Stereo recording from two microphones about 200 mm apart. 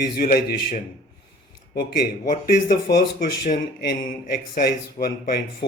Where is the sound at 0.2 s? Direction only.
50° left (ahead or behind).